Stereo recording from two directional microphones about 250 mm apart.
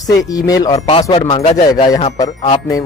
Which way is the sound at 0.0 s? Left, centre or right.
Centre.